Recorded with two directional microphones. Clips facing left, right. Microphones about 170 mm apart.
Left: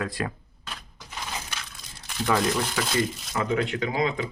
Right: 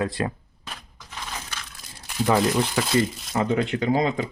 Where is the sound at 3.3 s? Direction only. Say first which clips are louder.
Right 4 dB; 30° right (ahead or behind).